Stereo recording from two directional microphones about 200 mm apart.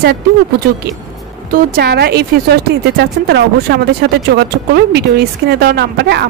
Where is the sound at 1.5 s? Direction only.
50° right (ahead or behind).